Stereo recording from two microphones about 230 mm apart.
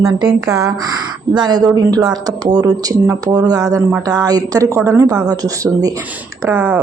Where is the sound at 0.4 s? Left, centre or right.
Centre.